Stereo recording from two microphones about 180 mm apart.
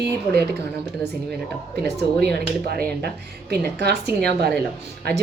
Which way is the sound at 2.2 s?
65° right (ahead or behind).